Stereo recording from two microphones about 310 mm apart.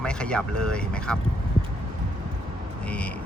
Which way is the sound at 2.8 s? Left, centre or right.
Centre.